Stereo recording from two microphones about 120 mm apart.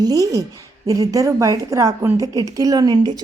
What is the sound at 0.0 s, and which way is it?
A woman's voice, 30° right (ahead or behind).